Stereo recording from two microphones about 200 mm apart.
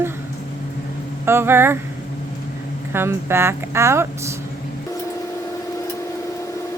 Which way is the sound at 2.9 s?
10° right (ahead or behind).